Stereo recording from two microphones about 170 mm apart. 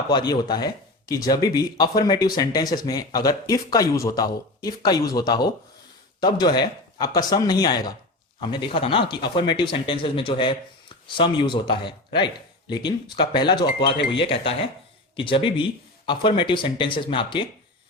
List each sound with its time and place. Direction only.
0.1 s speech: 25° left (ahead or behind)